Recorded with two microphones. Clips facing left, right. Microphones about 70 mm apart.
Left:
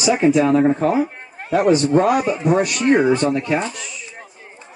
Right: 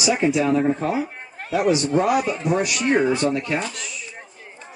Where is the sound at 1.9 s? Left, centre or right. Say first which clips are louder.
Left 4 dB; left.